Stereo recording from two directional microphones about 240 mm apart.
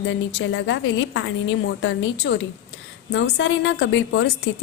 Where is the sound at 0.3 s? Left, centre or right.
Left.